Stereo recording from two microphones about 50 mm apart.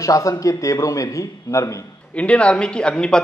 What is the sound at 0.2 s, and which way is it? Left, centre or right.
A man's voice, left.